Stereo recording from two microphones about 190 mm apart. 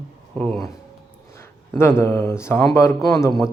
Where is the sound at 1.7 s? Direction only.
15° left (ahead or behind).